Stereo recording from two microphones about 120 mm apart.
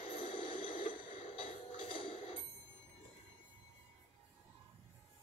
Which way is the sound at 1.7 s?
50° left (ahead or behind).